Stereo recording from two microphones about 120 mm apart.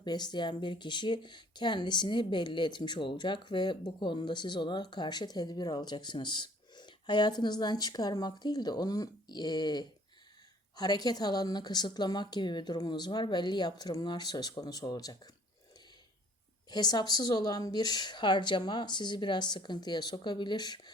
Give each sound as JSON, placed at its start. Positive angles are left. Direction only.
{"t": 0.0, "sound": "speech", "side_deg": 35}
{"t": 16.6, "sound": "speech", "side_deg": 35}